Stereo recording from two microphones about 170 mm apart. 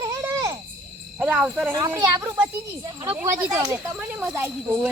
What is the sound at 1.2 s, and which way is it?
A child's voice, 10° right (ahead or behind).